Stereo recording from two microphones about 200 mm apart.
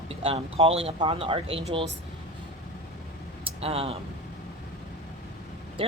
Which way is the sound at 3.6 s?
30° right (ahead or behind).